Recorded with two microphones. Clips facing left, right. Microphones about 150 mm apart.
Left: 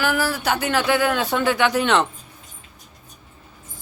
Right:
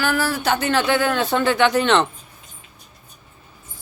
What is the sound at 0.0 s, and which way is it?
A woman's voice, 10° left (ahead or behind).